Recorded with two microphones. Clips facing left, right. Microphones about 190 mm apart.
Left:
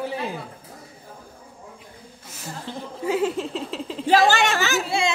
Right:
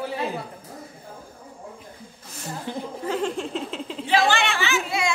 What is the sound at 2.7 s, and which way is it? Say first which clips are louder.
Speech: right 3 dB; 15° right (ahead or behind).